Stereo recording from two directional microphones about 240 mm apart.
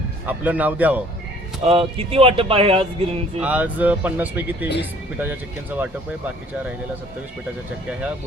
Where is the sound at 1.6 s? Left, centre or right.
Right.